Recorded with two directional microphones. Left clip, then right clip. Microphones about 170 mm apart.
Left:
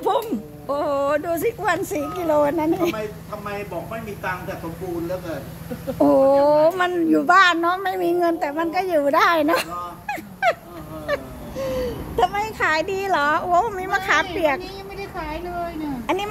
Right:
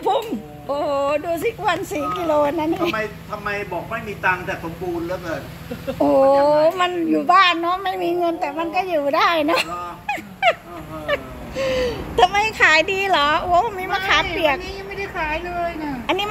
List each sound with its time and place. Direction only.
0.0 s dog: 15° left (ahead or behind)
1.9 s speech: 15° left (ahead or behind)
5.9 s a woman's voice: 20° left (ahead or behind)
9.0 s a sound: 25° left (ahead or behind)
11.5 s a woman's voice: 5° right (ahead or behind); by 16.2 s 10° left (ahead or behind)